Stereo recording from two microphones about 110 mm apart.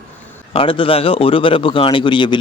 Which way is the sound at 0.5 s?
50° left (ahead or behind).